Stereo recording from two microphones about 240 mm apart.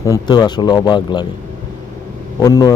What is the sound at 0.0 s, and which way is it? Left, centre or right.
Speech, centre.